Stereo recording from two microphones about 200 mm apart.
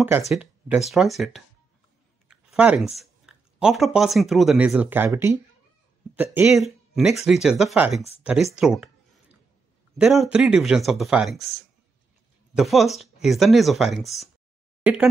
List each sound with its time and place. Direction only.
0.3 s speech: 10° right (ahead or behind)
9.9 s speech: centre (ahead or behind)
12.5 s speech: centre (ahead or behind)
14.8 s a sound: 5° right (ahead or behind)